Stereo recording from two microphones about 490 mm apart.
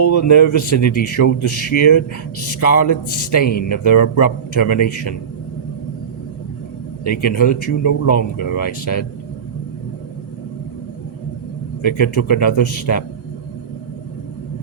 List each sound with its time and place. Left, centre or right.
0.0 s a man's voice: left
7.0 s a man's voice: left
11.8 s a man's voice: left